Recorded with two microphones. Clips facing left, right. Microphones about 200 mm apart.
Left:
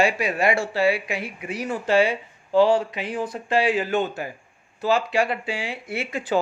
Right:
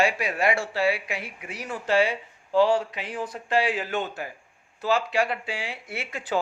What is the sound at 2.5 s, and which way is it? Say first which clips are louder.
Speech: left 3 dB; 25° left (ahead or behind).